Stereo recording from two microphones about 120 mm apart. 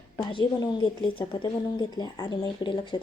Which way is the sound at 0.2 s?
45° left (ahead or behind).